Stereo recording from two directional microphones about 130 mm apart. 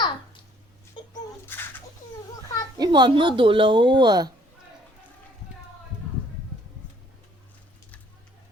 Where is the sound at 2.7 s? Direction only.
35° right (ahead or behind).